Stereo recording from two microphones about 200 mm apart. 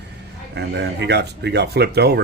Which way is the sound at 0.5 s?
55° right (ahead or behind).